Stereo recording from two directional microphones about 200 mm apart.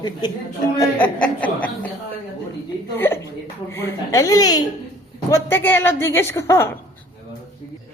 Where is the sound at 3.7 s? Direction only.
10° left (ahead or behind).